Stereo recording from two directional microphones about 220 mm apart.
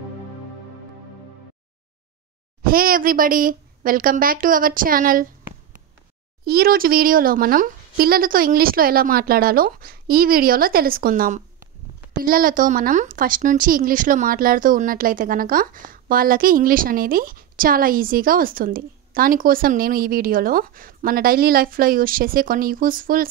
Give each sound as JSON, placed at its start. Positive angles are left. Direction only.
{"t": 2.6, "sound": "speech", "side_deg": -40}